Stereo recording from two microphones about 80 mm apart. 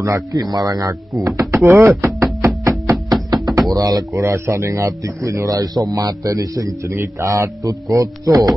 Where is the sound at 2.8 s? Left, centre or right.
Right.